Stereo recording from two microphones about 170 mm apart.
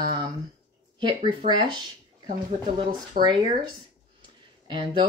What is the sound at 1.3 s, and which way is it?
Speech, 30° right (ahead or behind).